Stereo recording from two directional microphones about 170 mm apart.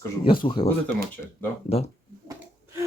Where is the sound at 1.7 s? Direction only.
35° left (ahead or behind).